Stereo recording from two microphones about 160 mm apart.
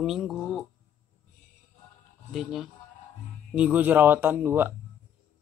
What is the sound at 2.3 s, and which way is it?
Speech, centre (ahead or behind).